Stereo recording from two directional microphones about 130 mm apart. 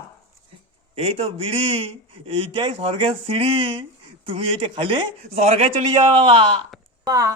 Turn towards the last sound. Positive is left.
turn(degrees=-25)  # may be behind; listen again after turning